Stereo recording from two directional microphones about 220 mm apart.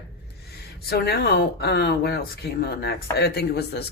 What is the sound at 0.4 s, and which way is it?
Speech, 45° left (ahead or behind).